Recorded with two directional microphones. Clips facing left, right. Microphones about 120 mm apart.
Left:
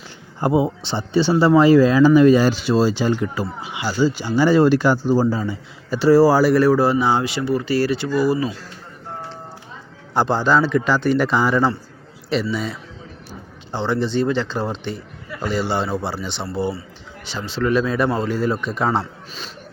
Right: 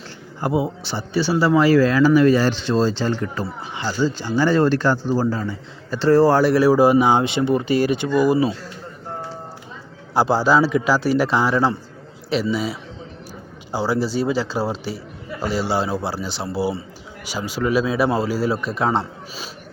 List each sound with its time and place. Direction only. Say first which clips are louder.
0.3 s speech: left 3 dB; 25° left (ahead or behind); by 8.5 s 20° right (ahead or behind)
10.2 s a man's voice: right 1 dB; 5° right (ahead or behind)